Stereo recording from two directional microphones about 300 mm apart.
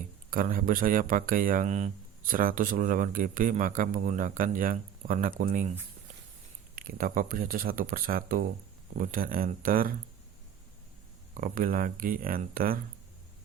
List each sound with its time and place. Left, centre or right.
0.3 s speech: right
6.7 s speech: right
11.3 s speech: right